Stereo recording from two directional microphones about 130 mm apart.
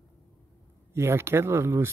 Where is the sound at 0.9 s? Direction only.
20° right (ahead or behind).